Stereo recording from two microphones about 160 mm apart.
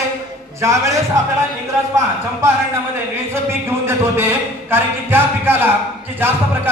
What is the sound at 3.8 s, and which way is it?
A man's voice, 15° right (ahead or behind).